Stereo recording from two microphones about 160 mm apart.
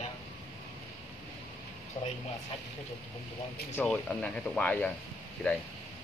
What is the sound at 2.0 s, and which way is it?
Speech, 30° left (ahead or behind).